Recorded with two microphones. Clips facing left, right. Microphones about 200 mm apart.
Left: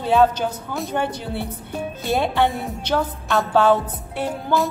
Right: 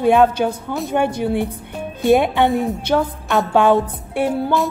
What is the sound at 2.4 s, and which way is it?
A woman's voice, 5° right (ahead or behind).